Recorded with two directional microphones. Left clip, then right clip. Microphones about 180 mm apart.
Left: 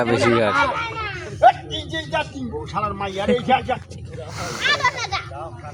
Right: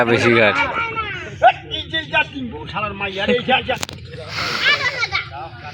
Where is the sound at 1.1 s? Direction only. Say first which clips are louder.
Even; centre (ahead or behind).